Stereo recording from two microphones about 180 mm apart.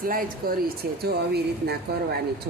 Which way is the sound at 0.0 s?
50° right (ahead or behind).